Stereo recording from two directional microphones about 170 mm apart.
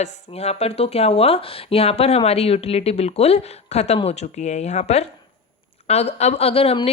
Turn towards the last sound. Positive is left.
turn(degrees=35)  # may be behind; listen again after turning